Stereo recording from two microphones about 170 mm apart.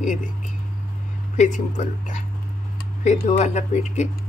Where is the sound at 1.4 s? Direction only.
45° left (ahead or behind).